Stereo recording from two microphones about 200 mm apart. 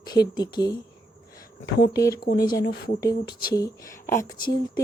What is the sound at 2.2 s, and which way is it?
Speech, 50° left (ahead or behind).